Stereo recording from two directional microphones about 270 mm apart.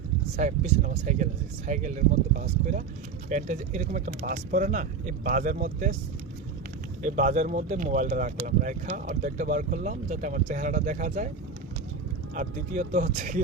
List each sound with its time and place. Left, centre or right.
0.3 s speech: right
7.0 s speech: right
12.3 s speech: right